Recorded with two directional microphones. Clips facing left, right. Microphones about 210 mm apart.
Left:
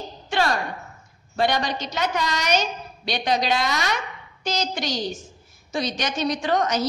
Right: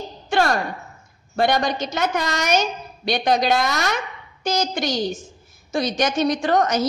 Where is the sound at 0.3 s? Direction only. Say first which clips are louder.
Right 3 dB; 50° right (ahead or behind).